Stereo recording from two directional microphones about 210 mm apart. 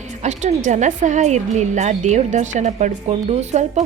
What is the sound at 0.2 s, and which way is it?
Speech, 35° right (ahead or behind).